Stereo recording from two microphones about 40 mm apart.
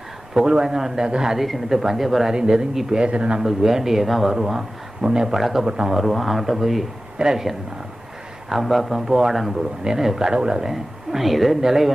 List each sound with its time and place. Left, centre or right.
0.3 s speech: centre
1.4 s a woman's voice: centre
2.3 s speech: centre
3.0 s speech: right
3.4 s speech: centre
5.3 s speech: centre
5.6 s speech: centre
6.0 s a woman's voice: centre
7.2 s speech: centre
8.4 s speech: centre; by 10.7 s right
10.7 s a woman's voice: centre